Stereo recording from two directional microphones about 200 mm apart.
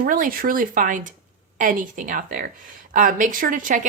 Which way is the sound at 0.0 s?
45° right (ahead or behind).